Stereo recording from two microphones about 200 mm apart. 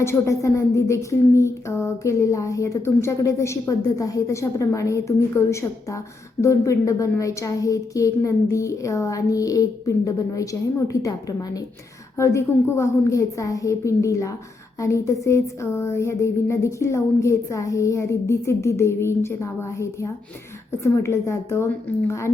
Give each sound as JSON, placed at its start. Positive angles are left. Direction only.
{"t": 0.0, "sound": "speech", "side_deg": 15}